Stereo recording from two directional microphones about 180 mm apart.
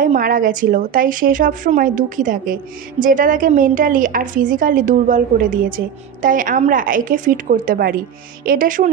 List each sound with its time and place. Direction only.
0.0 s a woman's voice: 50° right (ahead or behind)